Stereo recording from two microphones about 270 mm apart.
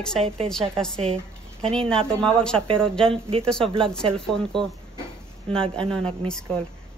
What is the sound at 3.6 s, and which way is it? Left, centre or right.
Speech, centre.